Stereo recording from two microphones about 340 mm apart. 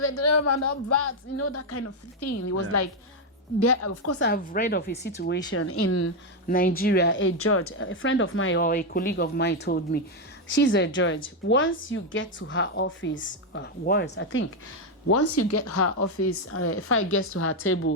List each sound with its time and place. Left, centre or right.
0.0 s speech: left
4.2 s speech: left
5.5 s a woman's voice: left
6.5 s a woman's voice: left
8.6 s a woman's voice: left
15.0 s a woman's voice: left